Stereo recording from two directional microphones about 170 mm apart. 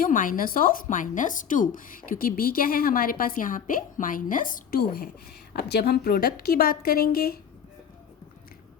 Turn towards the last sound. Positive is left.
turn(degrees=65)  # may be behind; listen again after turning